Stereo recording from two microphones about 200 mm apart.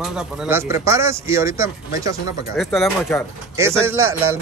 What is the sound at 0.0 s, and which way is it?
Speech, 10° right (ahead or behind).